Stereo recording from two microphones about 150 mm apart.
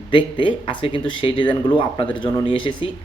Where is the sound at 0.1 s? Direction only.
35° left (ahead or behind).